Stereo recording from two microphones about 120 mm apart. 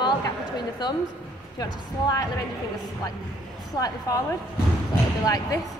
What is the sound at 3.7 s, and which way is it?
Speech, 30° left (ahead or behind).